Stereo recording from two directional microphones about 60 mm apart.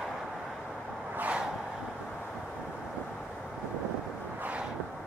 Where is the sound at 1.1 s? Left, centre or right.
Right.